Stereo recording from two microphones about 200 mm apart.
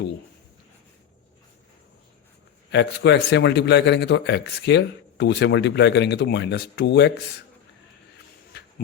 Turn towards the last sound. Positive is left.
turn(degrees=60)  # may be behind; listen again after turning